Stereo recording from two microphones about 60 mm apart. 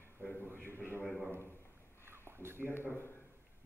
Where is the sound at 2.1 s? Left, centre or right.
Right.